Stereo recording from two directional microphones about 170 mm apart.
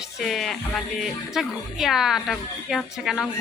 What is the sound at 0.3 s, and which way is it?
A woman's voice, centre (ahead or behind).